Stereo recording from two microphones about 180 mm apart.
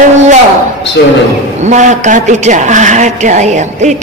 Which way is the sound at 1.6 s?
40° right (ahead or behind).